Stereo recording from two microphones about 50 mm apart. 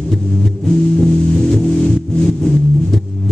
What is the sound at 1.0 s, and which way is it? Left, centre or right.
Music, centre.